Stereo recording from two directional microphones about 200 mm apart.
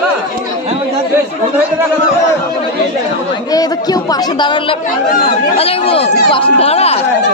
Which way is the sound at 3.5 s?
20° left (ahead or behind).